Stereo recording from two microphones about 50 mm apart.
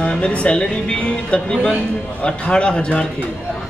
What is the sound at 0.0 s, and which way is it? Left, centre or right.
A man's voice, centre.